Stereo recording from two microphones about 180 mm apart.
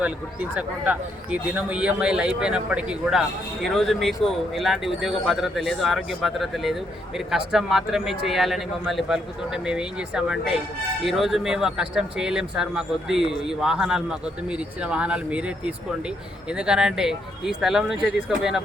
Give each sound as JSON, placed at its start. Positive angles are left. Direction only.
{"t": 0.0, "sound": "speech", "side_deg": -10}